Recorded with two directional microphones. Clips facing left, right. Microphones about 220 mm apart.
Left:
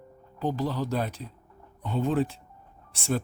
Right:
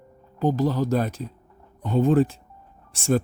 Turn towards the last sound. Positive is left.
turn(degrees=-45)  # may be behind; listen again after turning